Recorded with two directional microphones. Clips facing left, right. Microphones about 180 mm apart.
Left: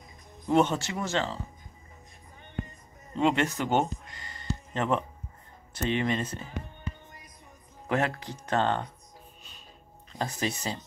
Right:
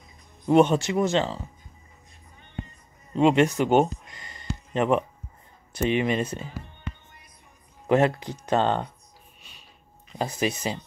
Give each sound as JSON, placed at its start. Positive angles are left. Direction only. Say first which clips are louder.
{"t": 0.5, "sound": "speech", "louder": "right 6 dB", "side_deg": -15}
{"t": 3.2, "sound": "a sound", "louder": "right 6 dB", "side_deg": -20}
{"t": 5.8, "sound": "speech", "louder": "right 4 dB", "side_deg": -15}
{"t": 7.9, "sound": "speech", "louder": "right 7 dB", "side_deg": -20}
{"t": 10.1, "sound": "speech", "louder": "right 5 dB", "side_deg": -15}